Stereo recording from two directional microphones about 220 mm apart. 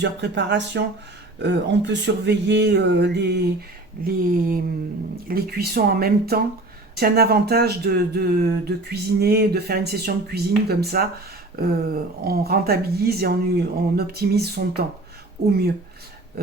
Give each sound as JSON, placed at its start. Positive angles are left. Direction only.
{"t": 0.0, "sound": "speech", "side_deg": -50}